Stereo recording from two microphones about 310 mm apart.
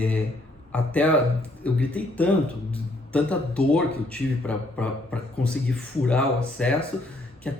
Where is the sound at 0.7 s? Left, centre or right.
Centre.